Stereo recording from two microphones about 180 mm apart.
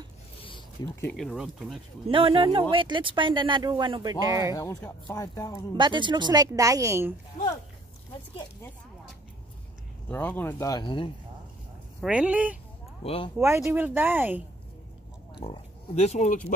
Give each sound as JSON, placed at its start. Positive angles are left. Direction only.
{"t": 0.8, "sound": "speech", "side_deg": 20}
{"t": 1.1, "sound": "speech", "side_deg": 0}
{"t": 2.0, "sound": "speech", "side_deg": -30}
{"t": 4.6, "sound": "speech", "side_deg": 20}
{"t": 5.8, "sound": "speech", "side_deg": -25}
{"t": 10.0, "sound": "speech", "side_deg": 10}
{"t": 12.0, "sound": "speech", "side_deg": -5}
{"t": 13.0, "sound": "speech", "side_deg": 30}
{"t": 13.6, "sound": "speech", "side_deg": -10}
{"t": 15.4, "sound": "speech", "side_deg": 35}